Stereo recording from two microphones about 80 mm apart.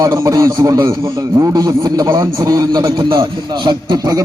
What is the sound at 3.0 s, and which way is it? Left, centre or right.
Speech, right.